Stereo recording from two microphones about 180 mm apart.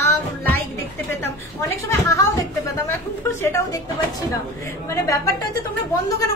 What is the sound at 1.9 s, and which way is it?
Speech, 15° left (ahead or behind).